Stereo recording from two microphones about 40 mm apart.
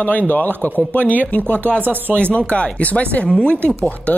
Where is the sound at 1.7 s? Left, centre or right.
Right.